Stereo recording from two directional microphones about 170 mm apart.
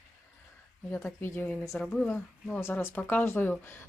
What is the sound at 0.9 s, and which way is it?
Speech, 10° left (ahead or behind).